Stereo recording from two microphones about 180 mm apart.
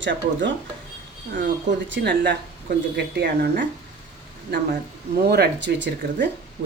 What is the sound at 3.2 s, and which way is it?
Speech, 60° right (ahead or behind).